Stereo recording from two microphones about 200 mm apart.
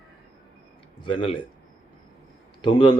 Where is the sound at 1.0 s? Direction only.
25° left (ahead or behind).